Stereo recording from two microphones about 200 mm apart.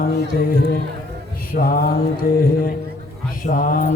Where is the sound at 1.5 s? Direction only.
45° left (ahead or behind).